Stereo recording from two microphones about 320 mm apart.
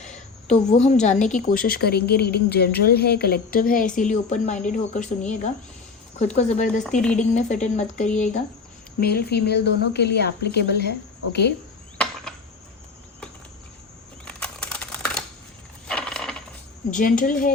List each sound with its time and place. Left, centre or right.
0.0 s a sound: left
1.0 s a woman's voice: left
14.3 s computer keyboard: centre
15.9 s mechanisms: centre
16.9 s a woman's voice: left